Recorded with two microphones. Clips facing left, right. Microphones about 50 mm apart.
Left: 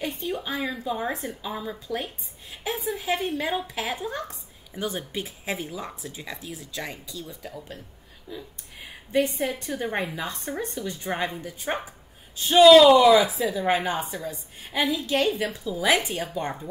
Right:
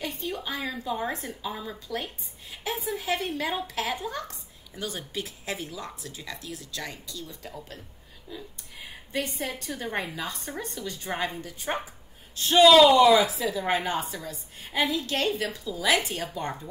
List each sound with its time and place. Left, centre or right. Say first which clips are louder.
0.0 s a woman's voice: left 3 dB; centre
7.4 s speech: left 2 dB; centre
8.3 s a woman's voice: left 3 dB; centre
9.5 s a woman's voice: left 4 dB; centre
11.4 s a woman's voice: left 2 dB; centre
12.6 s a woman's voice: left 3 dB; centre